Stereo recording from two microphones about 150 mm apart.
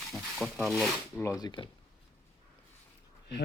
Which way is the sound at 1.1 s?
20° left (ahead or behind).